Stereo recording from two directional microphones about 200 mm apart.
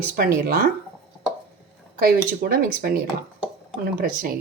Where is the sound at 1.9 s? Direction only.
45° right (ahead or behind).